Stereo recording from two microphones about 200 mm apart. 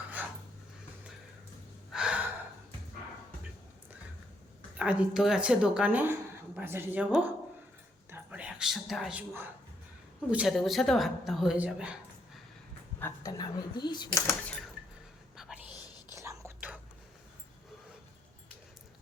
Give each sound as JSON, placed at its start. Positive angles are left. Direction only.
{"t": 0.2, "sound": "a sound", "side_deg": -10}
{"t": 1.9, "sound": "gasp", "side_deg": -5}
{"t": 4.8, "sound": "a woman's voice", "side_deg": -5}
{"t": 13.0, "sound": "speech", "side_deg": 15}
{"t": 15.4, "sound": "whispering", "side_deg": -5}
{"t": 16.1, "sound": "whispering", "side_deg": -15}